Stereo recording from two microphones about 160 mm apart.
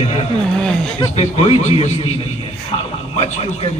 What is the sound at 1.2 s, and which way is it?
Speech, 40° left (ahead or behind).